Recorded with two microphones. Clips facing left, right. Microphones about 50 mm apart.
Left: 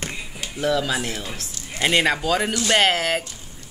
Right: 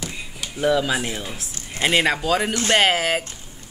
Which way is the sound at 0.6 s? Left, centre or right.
Centre.